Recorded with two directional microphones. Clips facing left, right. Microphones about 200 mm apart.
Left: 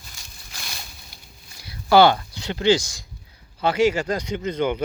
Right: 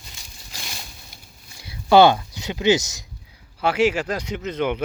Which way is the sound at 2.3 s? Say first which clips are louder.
Even; 15° right (ahead or behind).